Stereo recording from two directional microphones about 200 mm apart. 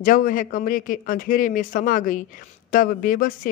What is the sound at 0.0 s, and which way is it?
A man's voice, 45° left (ahead or behind).